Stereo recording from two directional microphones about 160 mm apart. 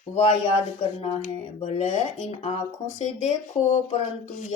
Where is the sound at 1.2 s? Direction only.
50° left (ahead or behind).